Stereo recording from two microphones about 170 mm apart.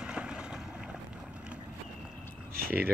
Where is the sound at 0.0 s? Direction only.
5° right (ahead or behind).